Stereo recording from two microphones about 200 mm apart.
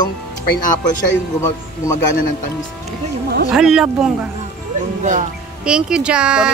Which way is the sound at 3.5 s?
5° right (ahead or behind).